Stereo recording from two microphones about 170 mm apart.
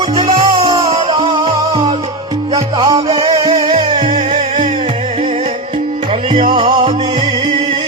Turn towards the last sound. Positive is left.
turn(degrees=-30)  # may be behind; listen again after turning